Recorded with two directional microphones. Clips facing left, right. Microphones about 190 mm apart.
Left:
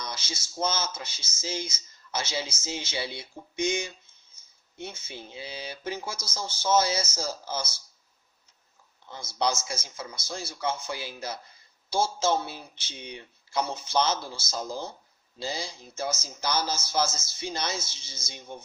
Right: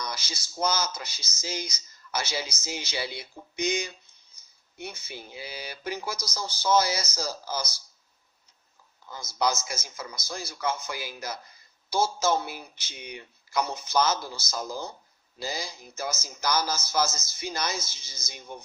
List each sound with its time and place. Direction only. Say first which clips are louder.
0.0 s speech: right 1 dB; 25° left (ahead or behind)
9.0 s speech: right 1 dB; 30° left (ahead or behind)
13.5 s speech: right 1 dB; 30° left (ahead or behind)